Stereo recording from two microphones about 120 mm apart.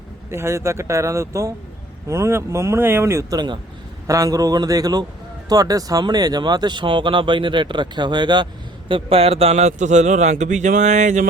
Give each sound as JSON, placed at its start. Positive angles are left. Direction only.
{"t": 0.3, "sound": "speech", "side_deg": -20}
{"t": 8.9, "sound": "a man's voice", "side_deg": -50}